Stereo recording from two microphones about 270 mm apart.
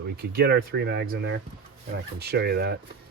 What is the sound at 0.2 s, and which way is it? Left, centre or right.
Speech, right.